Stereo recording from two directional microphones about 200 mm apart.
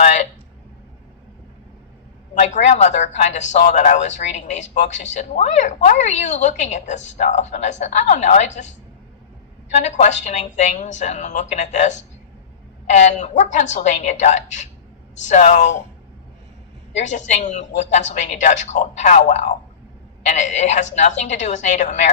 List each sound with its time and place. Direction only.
0.0 s a sound: 35° left (ahead or behind)
2.3 s a woman's voice: 35° left (ahead or behind)
9.7 s a woman's voice: 35° left (ahead or behind)
16.9 s a woman's voice: 35° left (ahead or behind)